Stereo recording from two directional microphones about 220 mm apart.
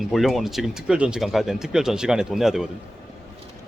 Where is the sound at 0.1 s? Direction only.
Centre (ahead or behind).